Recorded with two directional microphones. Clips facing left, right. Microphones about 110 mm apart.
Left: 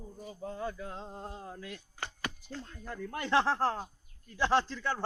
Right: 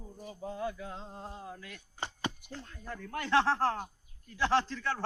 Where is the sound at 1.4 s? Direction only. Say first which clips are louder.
Left 2 dB; 30° left (ahead or behind).